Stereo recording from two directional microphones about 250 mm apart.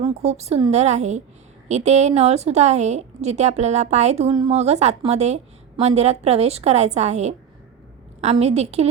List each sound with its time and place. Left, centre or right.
0.0 s a woman's voice: right